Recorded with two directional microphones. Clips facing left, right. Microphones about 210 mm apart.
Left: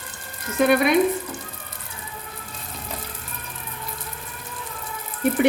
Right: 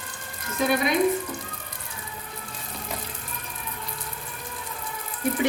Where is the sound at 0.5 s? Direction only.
60° left (ahead or behind).